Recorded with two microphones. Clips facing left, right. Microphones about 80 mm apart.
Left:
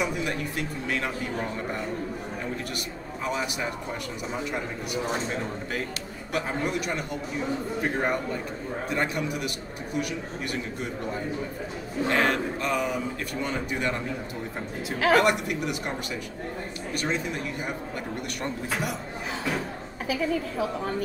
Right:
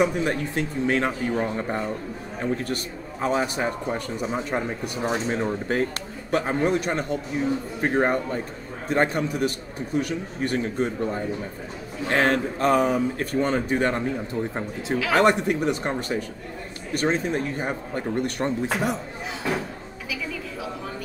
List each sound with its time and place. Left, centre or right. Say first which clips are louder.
0.0 s a man's voice: right 6 dB; right
15.1 s a man's voice: right 7 dB; right
20.1 s a woman's voice: left 6 dB; left